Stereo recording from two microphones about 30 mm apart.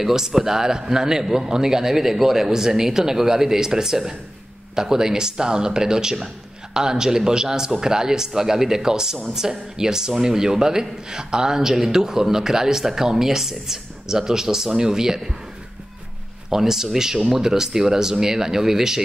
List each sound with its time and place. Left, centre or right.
0.0 s a man's voice: centre
16.4 s a man's voice: centre